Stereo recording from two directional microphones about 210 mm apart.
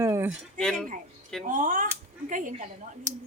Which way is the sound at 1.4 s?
40° right (ahead or behind).